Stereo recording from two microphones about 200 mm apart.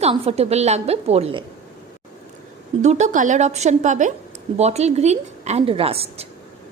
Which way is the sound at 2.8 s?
35° right (ahead or behind).